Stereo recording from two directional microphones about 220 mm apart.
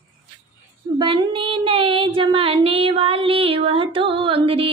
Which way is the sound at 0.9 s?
25° right (ahead or behind).